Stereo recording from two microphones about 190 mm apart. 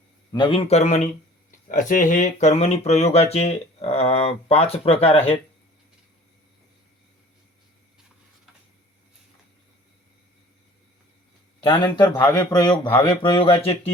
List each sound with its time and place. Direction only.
0.3 s speech: 25° left (ahead or behind)
11.6 s speech: 25° left (ahead or behind)